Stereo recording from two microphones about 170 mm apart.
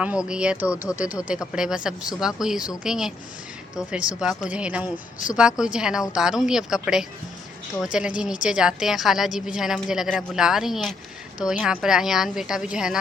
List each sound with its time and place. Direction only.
0.0 s a woman's voice: 5° right (ahead or behind)